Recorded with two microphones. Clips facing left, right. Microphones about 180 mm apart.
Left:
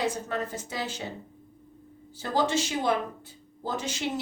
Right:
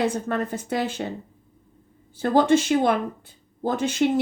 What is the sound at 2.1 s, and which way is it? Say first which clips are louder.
Speech: right 8 dB; 55° right (ahead or behind).